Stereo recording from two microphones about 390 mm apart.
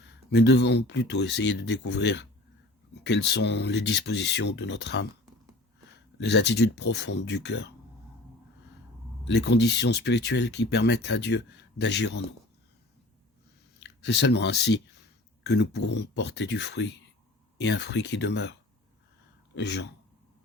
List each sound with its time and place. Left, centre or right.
0.3 s speech: left
3.2 s speech: left
6.5 s speech: left
9.2 s speech: left
13.7 s speech: left
19.5 s speech: left